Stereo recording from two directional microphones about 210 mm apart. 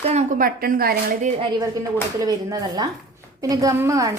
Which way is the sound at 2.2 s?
15° right (ahead or behind).